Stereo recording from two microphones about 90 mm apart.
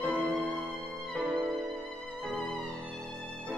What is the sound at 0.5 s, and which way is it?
Music, 15° right (ahead or behind).